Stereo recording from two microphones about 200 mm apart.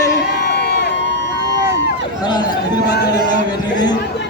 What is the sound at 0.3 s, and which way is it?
Crowd, 55° left (ahead or behind).